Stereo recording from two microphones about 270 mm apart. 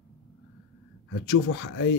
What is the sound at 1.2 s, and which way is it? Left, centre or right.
Speech, left.